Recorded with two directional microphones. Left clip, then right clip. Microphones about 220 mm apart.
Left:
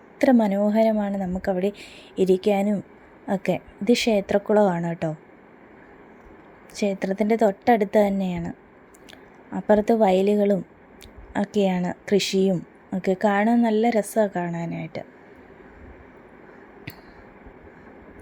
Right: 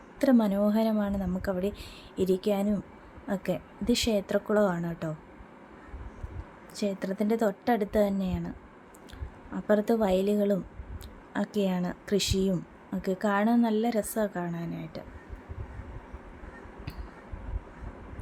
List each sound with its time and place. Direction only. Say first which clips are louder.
0.2 s a woman's voice: left 6 dB; 15° left (ahead or behind)
6.7 s a woman's voice: left 7 dB; 20° left (ahead or behind)